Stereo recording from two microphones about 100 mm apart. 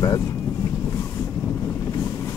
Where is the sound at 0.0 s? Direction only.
30° left (ahead or behind).